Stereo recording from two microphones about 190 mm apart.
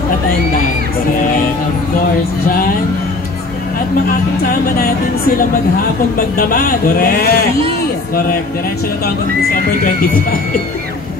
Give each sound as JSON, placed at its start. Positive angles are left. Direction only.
{"t": 4.5, "sound": "a man's voice", "side_deg": 55}
{"t": 6.1, "sound": "a man's voice", "side_deg": 50}